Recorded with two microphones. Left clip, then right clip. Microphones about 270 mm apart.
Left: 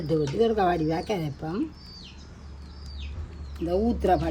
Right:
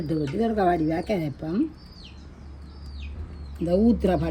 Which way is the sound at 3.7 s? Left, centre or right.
Right.